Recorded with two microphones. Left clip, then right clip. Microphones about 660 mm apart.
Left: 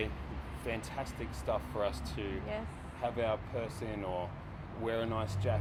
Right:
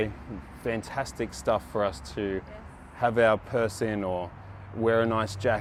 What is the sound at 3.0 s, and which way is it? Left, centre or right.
Speech, right.